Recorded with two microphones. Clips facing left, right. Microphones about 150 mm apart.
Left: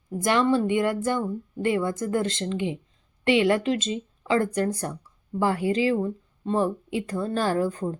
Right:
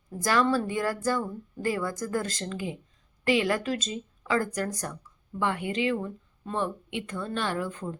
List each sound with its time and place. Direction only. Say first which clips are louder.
0.2 s speech: left 3 dB; 25° left (ahead or behind)